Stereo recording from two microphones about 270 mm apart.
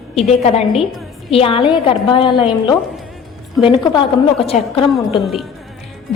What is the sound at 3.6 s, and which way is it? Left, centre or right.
A woman's voice, centre.